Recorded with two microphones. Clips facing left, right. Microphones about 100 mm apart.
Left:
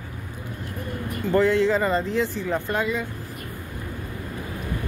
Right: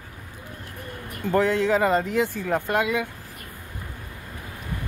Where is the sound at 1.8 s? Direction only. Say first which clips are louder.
Right 1 dB; 60° right (ahead or behind).